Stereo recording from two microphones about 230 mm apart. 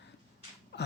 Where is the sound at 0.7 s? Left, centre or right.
Left.